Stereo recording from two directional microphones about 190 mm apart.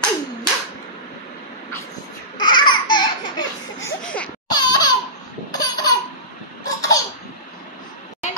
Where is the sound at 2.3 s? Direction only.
25° left (ahead or behind).